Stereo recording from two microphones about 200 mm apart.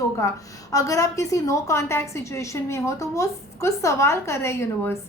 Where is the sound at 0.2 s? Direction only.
15° left (ahead or behind).